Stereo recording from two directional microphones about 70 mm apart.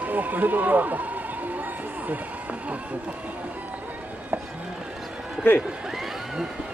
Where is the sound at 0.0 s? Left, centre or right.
Right.